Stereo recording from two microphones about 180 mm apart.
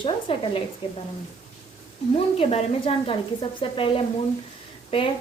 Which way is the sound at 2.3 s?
35° left (ahead or behind).